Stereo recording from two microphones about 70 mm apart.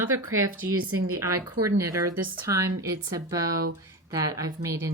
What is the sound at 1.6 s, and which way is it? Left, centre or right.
A woman's voice, right.